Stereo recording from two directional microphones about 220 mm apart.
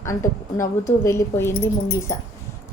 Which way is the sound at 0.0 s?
15° left (ahead or behind).